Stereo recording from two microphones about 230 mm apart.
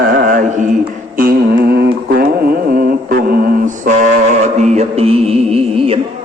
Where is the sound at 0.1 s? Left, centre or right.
Right.